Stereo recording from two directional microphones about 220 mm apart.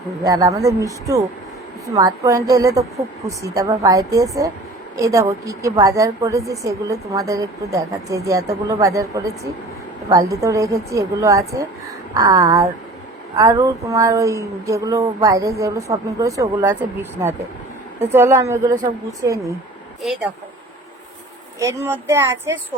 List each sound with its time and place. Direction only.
0.2 s a woman's voice: 15° right (ahead or behind)
21.6 s a woman's voice: 15° right (ahead or behind)